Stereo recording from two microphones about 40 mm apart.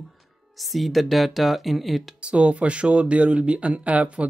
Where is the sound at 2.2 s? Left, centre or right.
Right.